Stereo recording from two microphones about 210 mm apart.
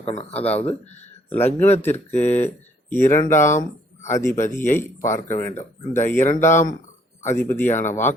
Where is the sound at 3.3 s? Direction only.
35° left (ahead or behind).